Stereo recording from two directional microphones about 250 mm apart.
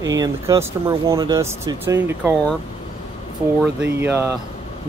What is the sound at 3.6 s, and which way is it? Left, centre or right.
Speech, centre.